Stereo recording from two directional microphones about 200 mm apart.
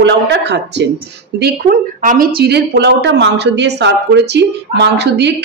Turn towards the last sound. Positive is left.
turn(degrees=-55)  # may be behind; listen again after turning